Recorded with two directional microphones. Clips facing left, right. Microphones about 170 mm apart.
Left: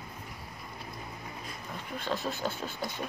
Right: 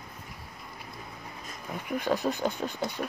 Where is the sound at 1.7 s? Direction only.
15° right (ahead or behind).